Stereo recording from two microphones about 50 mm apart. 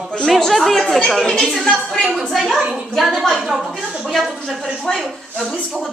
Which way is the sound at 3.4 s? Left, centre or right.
Centre.